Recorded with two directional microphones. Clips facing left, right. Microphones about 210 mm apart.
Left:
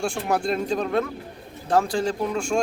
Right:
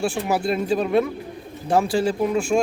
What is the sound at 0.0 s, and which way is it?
Speech, 5° right (ahead or behind).